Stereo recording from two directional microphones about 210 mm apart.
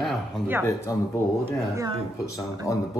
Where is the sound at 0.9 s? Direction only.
15° left (ahead or behind).